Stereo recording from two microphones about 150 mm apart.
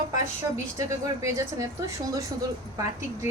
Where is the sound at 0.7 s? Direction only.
20° right (ahead or behind).